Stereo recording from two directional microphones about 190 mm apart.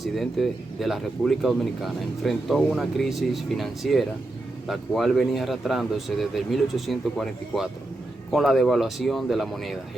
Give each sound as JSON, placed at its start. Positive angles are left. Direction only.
{"t": 0.0, "sound": "speech", "side_deg": 0}